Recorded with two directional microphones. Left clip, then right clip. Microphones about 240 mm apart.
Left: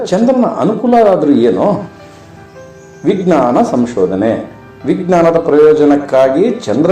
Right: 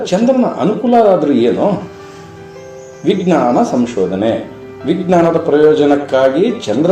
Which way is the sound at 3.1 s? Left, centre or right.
Left.